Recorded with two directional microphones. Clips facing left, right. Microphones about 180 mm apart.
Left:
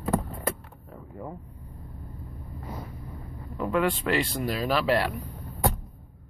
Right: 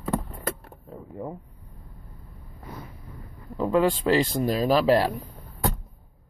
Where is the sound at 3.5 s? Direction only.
30° right (ahead or behind).